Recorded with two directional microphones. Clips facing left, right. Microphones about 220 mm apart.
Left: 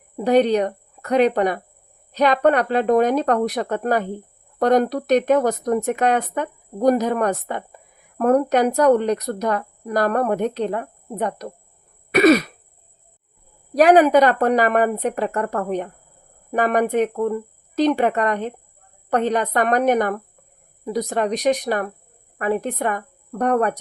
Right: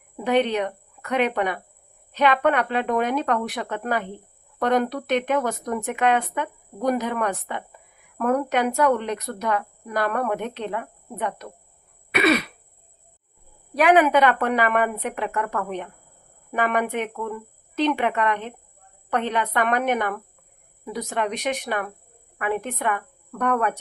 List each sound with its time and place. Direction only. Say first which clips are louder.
0.2 s speech: left 5 dB; 40° left (ahead or behind)
13.7 s a woman's voice: left 5 dB; 40° left (ahead or behind)